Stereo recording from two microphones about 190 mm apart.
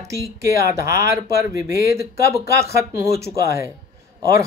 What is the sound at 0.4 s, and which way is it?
Speech, 15° right (ahead or behind).